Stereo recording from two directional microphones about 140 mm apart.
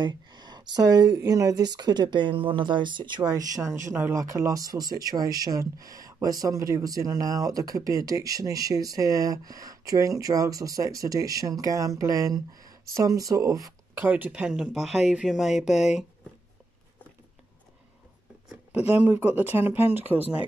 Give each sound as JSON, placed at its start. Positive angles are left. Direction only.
{"t": 0.0, "sound": "speech", "side_deg": -30}
{"t": 14.0, "sound": "speech", "side_deg": -10}
{"t": 15.5, "sound": "speech", "side_deg": 55}
{"t": 18.5, "sound": "speech", "side_deg": -10}